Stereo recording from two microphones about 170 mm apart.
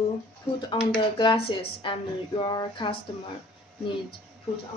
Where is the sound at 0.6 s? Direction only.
25° left (ahead or behind).